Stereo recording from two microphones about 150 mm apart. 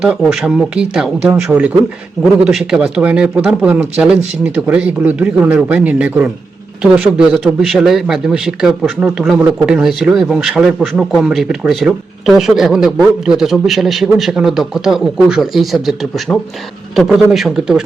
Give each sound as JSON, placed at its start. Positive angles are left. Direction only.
{"t": 0.0, "sound": "speech", "side_deg": -5}